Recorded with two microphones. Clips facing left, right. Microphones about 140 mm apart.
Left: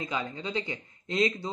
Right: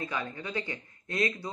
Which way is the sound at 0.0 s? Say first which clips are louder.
Left 2 dB; 15° left (ahead or behind).